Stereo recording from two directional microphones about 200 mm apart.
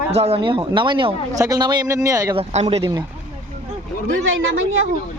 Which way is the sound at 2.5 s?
30° right (ahead or behind).